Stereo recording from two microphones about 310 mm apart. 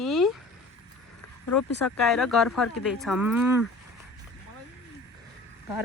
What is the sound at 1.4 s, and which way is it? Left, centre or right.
Speech, left.